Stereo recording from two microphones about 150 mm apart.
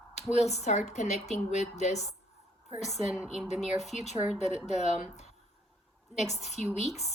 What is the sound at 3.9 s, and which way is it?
Speech, 50° left (ahead or behind).